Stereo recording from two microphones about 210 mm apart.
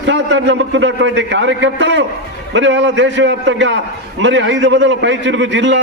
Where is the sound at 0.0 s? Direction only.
60° right (ahead or behind).